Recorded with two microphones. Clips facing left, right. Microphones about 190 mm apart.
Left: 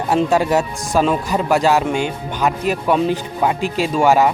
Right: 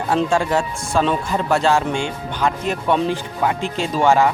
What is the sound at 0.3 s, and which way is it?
Speech, 20° left (ahead or behind).